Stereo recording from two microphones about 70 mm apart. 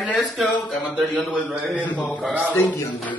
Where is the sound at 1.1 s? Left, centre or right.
Left.